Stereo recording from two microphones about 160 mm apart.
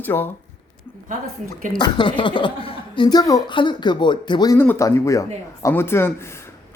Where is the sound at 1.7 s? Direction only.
30° left (ahead or behind).